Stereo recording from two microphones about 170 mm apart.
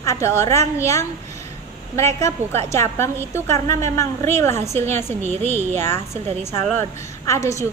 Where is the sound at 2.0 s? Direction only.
15° left (ahead or behind).